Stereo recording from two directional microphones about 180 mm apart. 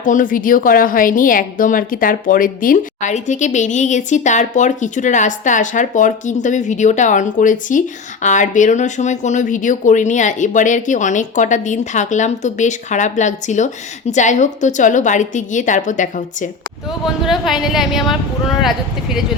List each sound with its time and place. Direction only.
0.0 s a woman's voice: 45° left (ahead or behind)
17.2 s a woman's voice: centre (ahead or behind)